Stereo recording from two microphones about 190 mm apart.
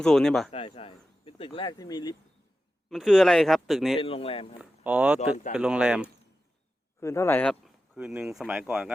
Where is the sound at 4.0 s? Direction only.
30° left (ahead or behind).